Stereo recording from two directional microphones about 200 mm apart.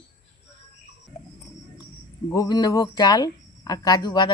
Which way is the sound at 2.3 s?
20° left (ahead or behind).